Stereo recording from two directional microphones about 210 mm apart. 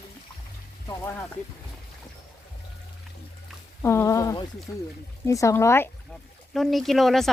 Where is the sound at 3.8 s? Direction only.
15° left (ahead or behind).